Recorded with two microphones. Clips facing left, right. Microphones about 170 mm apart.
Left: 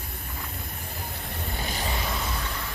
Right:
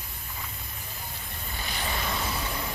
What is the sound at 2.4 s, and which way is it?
Vehicle, 15° right (ahead or behind).